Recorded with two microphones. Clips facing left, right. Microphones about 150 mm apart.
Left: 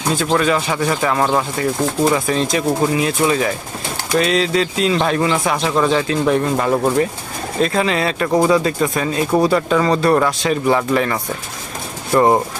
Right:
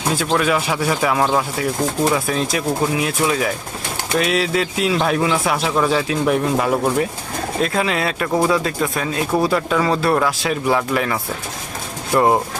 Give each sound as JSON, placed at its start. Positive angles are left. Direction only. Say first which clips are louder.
{"t": 0.2, "sound": "speech", "louder": "left 2 dB", "side_deg": -5}